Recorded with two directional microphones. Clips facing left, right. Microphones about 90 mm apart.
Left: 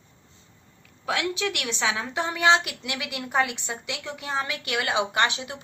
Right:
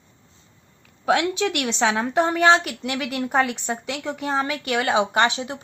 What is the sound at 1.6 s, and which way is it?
A woman's voice, 50° right (ahead or behind).